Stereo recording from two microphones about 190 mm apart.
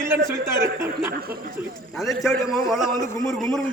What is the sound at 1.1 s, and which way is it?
Speech, 55° right (ahead or behind).